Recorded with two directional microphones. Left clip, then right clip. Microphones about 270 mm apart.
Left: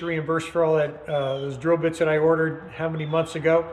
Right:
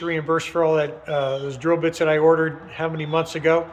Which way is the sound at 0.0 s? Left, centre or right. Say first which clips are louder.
Right 3 dB; centre.